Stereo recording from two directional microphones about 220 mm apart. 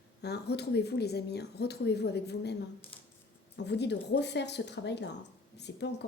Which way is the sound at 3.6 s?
50° left (ahead or behind).